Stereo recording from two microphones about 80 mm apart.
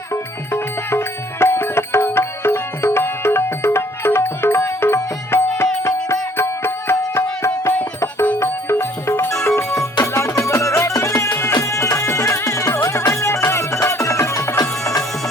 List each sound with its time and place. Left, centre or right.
0.1 s music: left
7.7 s music: left
8.4 s music: left